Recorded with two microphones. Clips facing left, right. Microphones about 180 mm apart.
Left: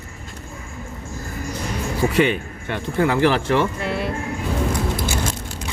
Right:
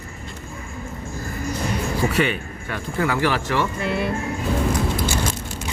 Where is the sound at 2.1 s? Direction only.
20° left (ahead or behind).